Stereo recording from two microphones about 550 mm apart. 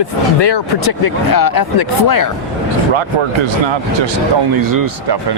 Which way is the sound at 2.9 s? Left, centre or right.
Right.